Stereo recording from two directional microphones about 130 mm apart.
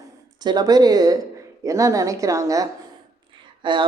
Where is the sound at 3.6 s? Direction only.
40° right (ahead or behind).